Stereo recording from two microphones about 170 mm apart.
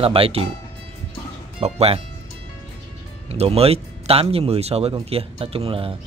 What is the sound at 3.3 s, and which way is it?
Speech, 35° right (ahead or behind).